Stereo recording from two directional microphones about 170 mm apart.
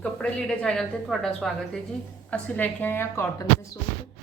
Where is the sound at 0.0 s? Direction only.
5° left (ahead or behind).